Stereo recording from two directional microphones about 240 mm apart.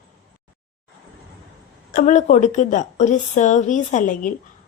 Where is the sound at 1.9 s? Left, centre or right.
Left.